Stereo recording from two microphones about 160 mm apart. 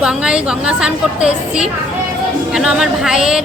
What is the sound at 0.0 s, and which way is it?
A woman's voice, 5° right (ahead or behind).